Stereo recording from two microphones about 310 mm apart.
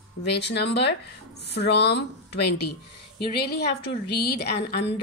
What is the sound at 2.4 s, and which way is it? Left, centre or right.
Speech, left.